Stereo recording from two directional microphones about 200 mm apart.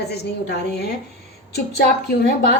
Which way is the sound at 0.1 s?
55° left (ahead or behind).